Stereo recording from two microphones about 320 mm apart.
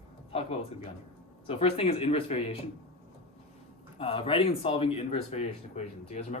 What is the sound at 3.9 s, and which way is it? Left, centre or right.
Speech, centre.